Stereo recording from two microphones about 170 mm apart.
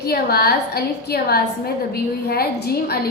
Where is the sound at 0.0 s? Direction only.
65° left (ahead or behind).